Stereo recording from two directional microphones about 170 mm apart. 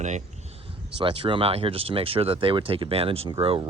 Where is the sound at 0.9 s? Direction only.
30° right (ahead or behind).